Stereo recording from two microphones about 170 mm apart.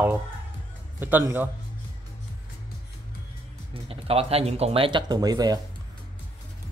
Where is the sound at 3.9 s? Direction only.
35° right (ahead or behind).